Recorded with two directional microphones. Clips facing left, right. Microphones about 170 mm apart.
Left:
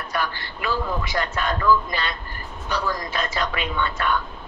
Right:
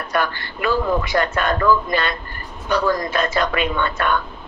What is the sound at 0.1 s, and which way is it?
A man's voice, 60° right (ahead or behind).